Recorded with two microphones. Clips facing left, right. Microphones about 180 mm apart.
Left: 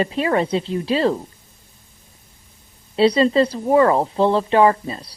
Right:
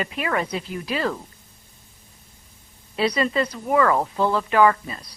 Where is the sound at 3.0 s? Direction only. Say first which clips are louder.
Left 7 dB; 30° left (ahead or behind).